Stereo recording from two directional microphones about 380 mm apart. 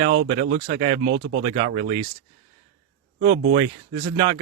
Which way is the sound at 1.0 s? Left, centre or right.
Right.